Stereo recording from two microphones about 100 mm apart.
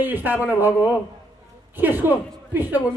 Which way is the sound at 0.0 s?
20° right (ahead or behind).